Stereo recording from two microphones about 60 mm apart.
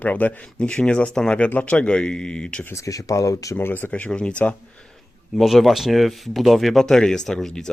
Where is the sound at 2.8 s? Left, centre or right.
Left.